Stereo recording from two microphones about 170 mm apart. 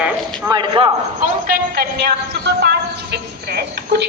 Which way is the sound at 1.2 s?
65° right (ahead or behind).